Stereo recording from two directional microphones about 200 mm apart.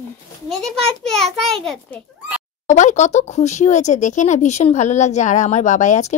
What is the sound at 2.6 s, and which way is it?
Speech, 35° left (ahead or behind).